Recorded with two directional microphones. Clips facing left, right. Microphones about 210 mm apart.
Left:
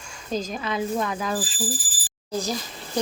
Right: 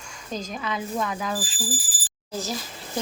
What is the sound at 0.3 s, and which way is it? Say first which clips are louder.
Speech: left 3 dB; 25° left (ahead or behind).